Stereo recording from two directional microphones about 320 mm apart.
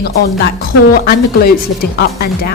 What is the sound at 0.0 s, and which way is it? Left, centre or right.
Speech, left.